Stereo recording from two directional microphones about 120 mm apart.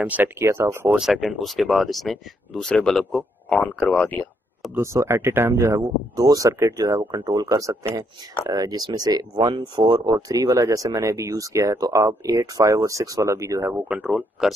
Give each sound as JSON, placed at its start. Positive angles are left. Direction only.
{"t": 0.0, "sound": "speech", "side_deg": -15}
{"t": 0.9, "sound": "speech", "side_deg": -5}
{"t": 4.7, "sound": "speech", "side_deg": -20}
{"t": 13.8, "sound": "speech", "side_deg": -10}